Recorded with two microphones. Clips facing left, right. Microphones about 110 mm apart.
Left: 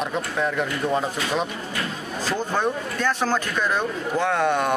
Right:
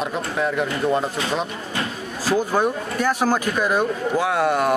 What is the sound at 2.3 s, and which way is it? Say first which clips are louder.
Speech: right 5 dB; 10° right (ahead or behind).